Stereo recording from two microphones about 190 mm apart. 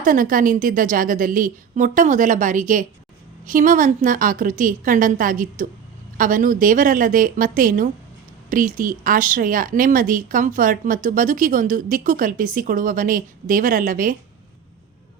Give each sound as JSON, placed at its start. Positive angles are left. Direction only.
{"t": 0.0, "sound": "speech", "side_deg": -45}